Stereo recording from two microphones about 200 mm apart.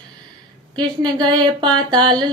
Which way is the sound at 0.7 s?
20° right (ahead or behind).